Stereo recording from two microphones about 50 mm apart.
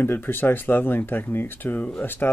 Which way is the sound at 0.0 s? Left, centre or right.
Left.